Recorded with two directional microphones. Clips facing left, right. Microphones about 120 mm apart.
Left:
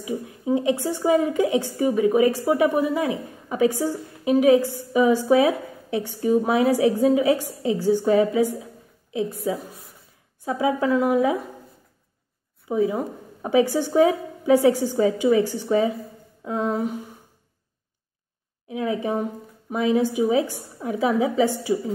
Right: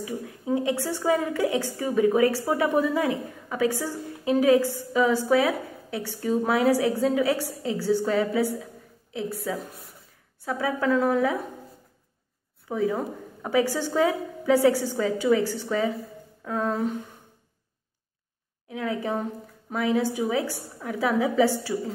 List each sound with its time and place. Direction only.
0.0 s a woman's voice: 20° left (ahead or behind)
12.6 s a woman's voice: 20° left (ahead or behind)
18.7 s a woman's voice: 20° left (ahead or behind)